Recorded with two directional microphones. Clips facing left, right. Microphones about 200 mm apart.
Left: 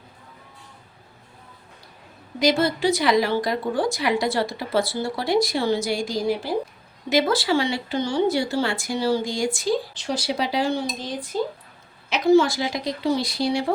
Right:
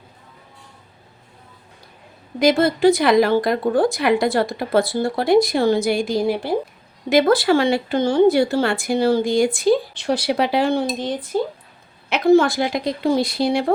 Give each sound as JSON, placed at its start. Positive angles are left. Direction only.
{"t": 2.4, "sound": "a woman's voice", "side_deg": -55}